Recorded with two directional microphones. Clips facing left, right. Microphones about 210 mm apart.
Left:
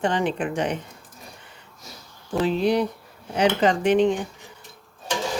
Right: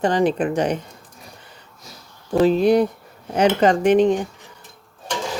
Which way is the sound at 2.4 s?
45° right (ahead or behind).